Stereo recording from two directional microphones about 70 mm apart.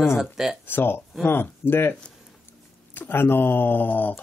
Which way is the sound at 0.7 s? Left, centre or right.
Left.